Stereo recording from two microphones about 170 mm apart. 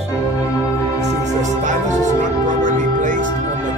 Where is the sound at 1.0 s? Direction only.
45° right (ahead or behind).